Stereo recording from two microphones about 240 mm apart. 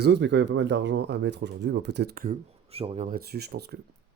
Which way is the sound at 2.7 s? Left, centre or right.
Right.